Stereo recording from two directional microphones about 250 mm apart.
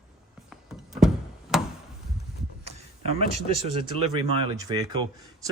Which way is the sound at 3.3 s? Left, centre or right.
Right.